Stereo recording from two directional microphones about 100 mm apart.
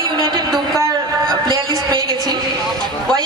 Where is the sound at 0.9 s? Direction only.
45° right (ahead or behind).